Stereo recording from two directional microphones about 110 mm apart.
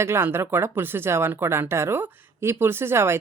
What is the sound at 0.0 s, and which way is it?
Speech, 20° right (ahead or behind).